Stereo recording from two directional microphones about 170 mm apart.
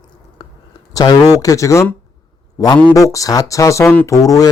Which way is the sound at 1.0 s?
25° left (ahead or behind).